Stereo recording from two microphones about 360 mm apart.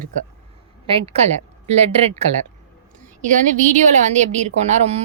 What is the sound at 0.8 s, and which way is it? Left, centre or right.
A woman's voice, centre.